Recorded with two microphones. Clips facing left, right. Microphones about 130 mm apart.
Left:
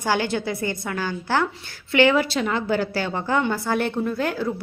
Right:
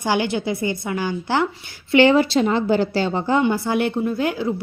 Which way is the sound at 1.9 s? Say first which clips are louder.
Right 4 dB; 25° right (ahead or behind).